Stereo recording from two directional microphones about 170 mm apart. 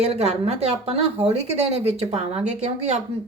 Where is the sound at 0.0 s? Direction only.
40° right (ahead or behind).